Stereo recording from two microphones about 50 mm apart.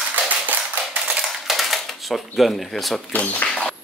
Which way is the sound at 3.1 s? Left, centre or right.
Left.